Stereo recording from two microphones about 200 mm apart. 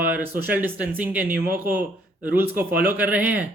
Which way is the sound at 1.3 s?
45° right (ahead or behind).